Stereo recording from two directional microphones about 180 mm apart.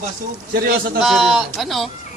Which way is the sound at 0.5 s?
55° right (ahead or behind).